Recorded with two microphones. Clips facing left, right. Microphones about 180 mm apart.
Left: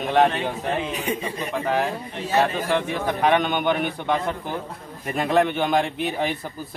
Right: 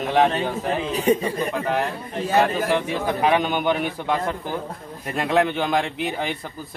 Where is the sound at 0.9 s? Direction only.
35° right (ahead or behind).